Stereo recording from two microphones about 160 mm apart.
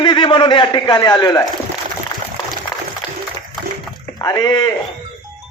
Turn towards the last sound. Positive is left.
turn(degrees=25)  # may be behind; listen again after turning